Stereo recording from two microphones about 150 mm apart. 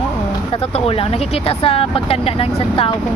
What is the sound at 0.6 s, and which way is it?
Speech, 40° left (ahead or behind).